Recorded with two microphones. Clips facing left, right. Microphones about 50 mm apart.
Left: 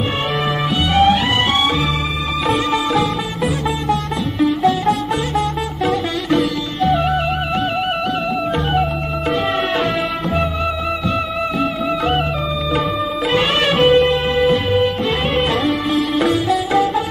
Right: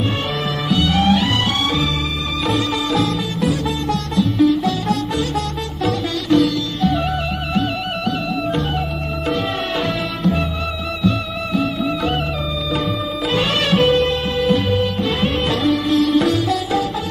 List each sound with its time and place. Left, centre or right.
0.7 s music: left
4.6 s music: centre
6.2 s music: left
13.3 s music: left
15.7 s sitar: centre
16.7 s music: left